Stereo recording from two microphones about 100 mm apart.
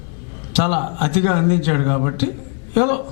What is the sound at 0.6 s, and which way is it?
A man's voice, 10° left (ahead or behind).